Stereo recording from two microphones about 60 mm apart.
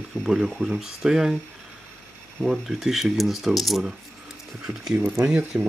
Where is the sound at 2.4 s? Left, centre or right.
Centre.